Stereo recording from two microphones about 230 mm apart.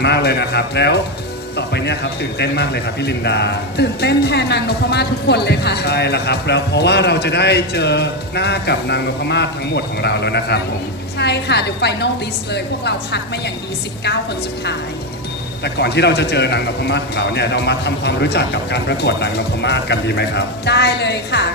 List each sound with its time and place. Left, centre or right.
0.0 s speech: left
15.6 s speech: left